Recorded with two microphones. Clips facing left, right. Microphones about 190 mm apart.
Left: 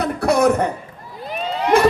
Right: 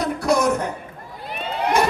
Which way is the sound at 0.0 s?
60° left (ahead or behind).